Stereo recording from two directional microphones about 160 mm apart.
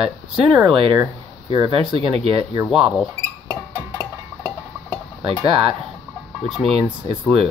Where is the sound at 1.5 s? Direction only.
30° right (ahead or behind).